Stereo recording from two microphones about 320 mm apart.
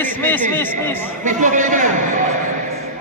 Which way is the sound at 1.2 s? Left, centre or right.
Right.